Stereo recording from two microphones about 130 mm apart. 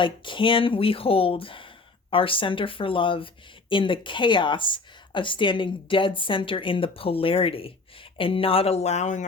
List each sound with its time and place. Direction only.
0.0 s a woman's voice: 40° left (ahead or behind); by 9.2 s 65° left (ahead or behind)